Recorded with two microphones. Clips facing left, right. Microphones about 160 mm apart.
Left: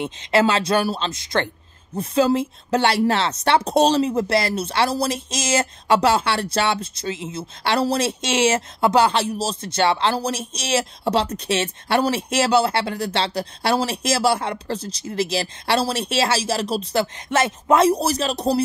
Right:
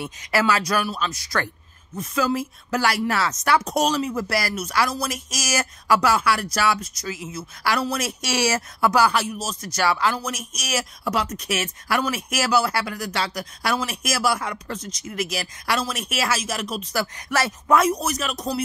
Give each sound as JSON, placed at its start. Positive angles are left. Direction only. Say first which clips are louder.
{"t": 0.0, "sound": "speech", "louder": "left 4 dB", "side_deg": 25}